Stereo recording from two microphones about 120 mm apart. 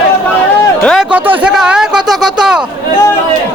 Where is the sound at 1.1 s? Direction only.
15° right (ahead or behind).